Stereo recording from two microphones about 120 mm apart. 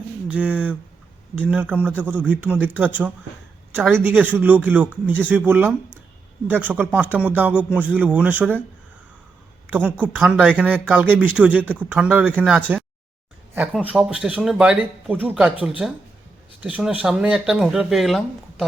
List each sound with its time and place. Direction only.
0.3 s a man's voice: 10° right (ahead or behind)
9.6 s a woman's voice: 15° right (ahead or behind)
11.6 s speech: 10° left (ahead or behind)
11.9 s a man's voice: 10° right (ahead or behind)
13.8 s a man's voice: 5° right (ahead or behind)